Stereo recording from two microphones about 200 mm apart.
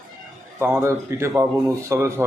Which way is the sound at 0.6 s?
10° right (ahead or behind).